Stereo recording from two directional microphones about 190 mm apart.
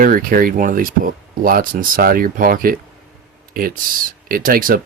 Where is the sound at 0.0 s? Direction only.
50° right (ahead or behind).